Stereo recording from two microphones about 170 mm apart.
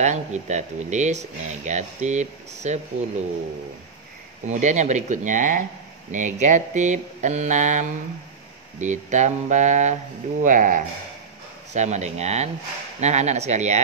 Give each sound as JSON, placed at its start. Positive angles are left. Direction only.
{"t": 0.0, "sound": "speech", "side_deg": -45}
{"t": 4.5, "sound": "speech", "side_deg": -45}